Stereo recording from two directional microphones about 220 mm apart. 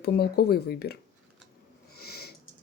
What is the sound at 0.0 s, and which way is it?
Speech, 45° left (ahead or behind).